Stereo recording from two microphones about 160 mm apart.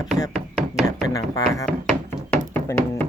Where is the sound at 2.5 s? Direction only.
10° left (ahead or behind).